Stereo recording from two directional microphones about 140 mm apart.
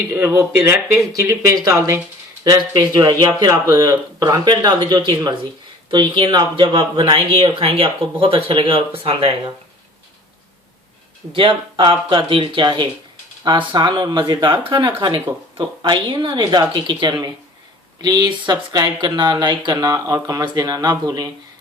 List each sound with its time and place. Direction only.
0.1 s speech: 15° right (ahead or behind); by 9.3 s 40° right (ahead or behind)
11.3 s speech: 35° right (ahead or behind)